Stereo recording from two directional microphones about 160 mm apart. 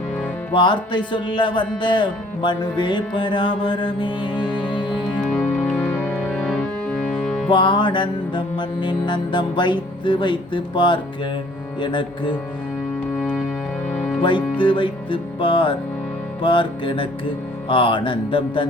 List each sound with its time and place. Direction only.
0.5 s a man's voice: 30° left (ahead or behind)
5.3 s music: 10° left (ahead or behind)
7.5 s a man's voice: 30° left (ahead or behind)
14.2 s speech: 30° left (ahead or behind)
14.6 s music: 30° left (ahead or behind)